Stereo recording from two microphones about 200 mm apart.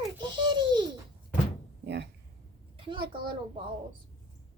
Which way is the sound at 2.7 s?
25° right (ahead or behind).